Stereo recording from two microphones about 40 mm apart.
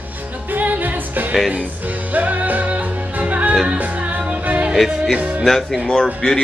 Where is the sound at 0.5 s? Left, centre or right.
Right.